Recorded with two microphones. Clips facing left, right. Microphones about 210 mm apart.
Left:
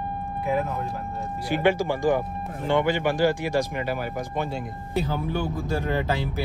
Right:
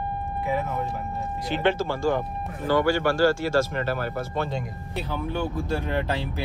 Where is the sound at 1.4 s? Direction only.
10° left (ahead or behind).